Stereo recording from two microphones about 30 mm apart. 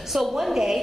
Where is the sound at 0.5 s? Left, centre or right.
Centre.